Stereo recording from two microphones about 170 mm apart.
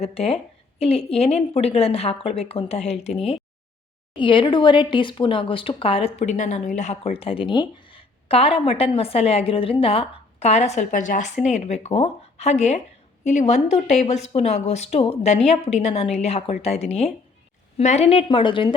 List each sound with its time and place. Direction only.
0.0 s speech: 35° left (ahead or behind)
4.2 s speech: 30° left (ahead or behind)